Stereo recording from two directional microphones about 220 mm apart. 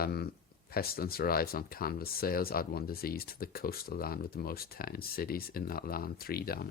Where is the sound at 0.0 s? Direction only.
45° left (ahead or behind).